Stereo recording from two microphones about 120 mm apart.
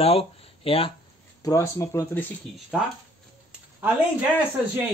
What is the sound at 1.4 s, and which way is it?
Speech, 25° left (ahead or behind).